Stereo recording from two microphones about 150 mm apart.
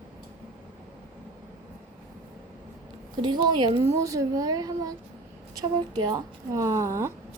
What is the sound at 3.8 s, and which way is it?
Speech, 20° right (ahead or behind).